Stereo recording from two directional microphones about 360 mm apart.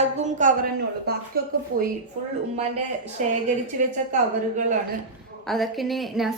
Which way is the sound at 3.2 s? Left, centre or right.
Centre.